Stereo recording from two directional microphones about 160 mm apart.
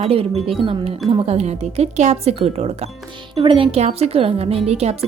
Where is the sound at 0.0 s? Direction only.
40° right (ahead or behind).